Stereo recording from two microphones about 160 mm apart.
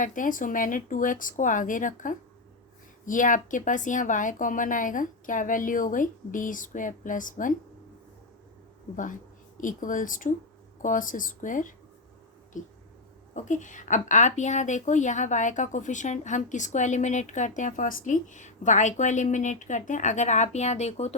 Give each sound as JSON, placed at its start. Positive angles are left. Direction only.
{"t": 0.0, "sound": "a woman's voice", "side_deg": 55}
{"t": 9.6, "sound": "a woman's voice", "side_deg": 55}